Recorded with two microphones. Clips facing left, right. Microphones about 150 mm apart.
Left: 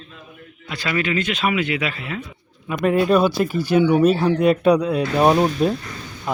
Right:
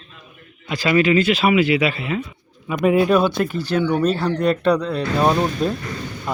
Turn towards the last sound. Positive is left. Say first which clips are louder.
# left 2 dB
turn(degrees=5)  # may be behind; listen again after turning